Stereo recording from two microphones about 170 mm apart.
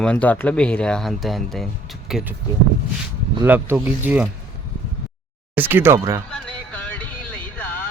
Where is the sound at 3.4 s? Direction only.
10° right (ahead or behind).